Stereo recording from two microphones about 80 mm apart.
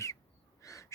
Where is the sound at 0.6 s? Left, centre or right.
Left.